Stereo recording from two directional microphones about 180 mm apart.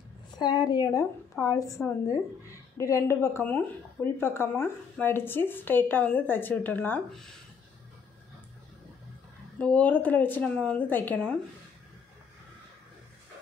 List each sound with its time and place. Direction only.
0.4 s a woman's voice: 25° left (ahead or behind); by 7.3 s 5° left (ahead or behind)
9.6 s a woman's voice: 5° left (ahead or behind)